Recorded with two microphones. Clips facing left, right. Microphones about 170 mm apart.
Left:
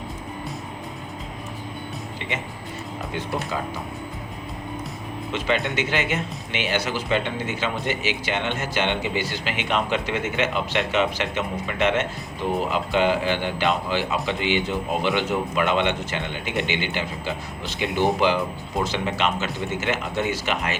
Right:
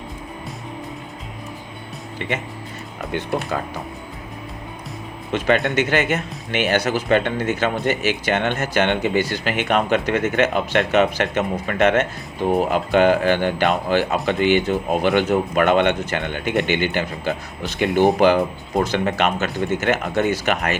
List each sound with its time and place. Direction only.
3.1 s speech: 65° right (ahead or behind)
5.7 s speech: 45° right (ahead or behind)